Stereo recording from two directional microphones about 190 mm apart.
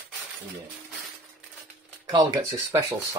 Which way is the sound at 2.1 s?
20° right (ahead or behind).